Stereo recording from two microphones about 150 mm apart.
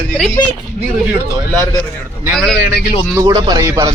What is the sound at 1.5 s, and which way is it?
Speech, 20° left (ahead or behind).